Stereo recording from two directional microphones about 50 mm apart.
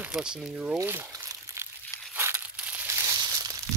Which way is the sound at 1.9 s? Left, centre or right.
Left.